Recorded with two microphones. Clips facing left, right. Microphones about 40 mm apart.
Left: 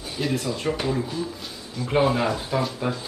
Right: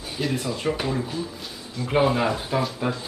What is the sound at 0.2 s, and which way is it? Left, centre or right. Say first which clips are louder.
Speech: even; centre.